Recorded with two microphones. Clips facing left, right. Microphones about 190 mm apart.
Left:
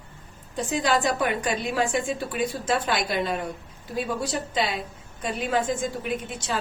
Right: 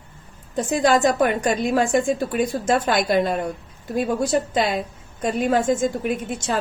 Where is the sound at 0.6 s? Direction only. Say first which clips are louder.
Right 6 dB; 45° right (ahead or behind).